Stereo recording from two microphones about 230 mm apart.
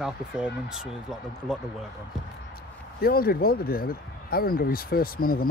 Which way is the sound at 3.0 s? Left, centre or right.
Left.